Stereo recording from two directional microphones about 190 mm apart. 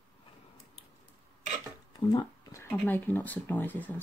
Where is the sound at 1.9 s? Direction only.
20° left (ahead or behind).